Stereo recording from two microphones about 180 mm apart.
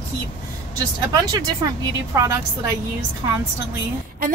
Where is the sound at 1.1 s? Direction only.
20° right (ahead or behind).